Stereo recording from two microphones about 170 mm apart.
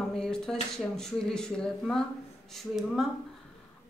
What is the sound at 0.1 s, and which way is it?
A woman's voice, 5° left (ahead or behind).